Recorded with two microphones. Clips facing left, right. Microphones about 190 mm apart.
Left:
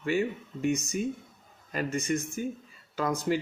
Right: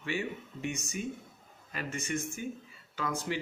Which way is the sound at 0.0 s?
45° left (ahead or behind).